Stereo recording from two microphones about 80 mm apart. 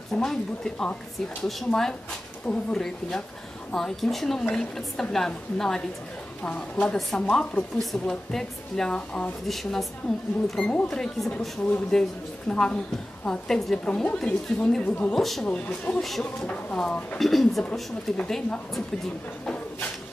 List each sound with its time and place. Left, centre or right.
0.1 s a woman's voice: centre
6.4 s a woman's voice: centre
10.5 s a woman's voice: centre
15.1 s a woman's voice: centre
15.5 s a woman's voice: centre
16.0 s a woman's voice: centre
16.3 s a woman's voice: centre
17.2 s a woman's voice: centre
19.4 s a sound: centre